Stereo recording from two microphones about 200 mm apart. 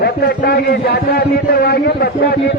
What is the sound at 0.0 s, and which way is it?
A man's voice, 50° left (ahead or behind).